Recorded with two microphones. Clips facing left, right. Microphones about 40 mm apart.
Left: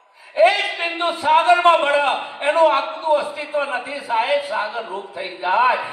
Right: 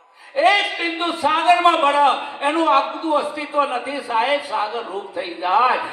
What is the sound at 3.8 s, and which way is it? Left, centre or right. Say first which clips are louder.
Speech: right 1 dB; right.